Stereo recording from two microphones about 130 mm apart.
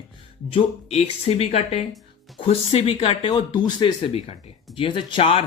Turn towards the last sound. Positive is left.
turn(degrees=45)  # may be behind; listen again after turning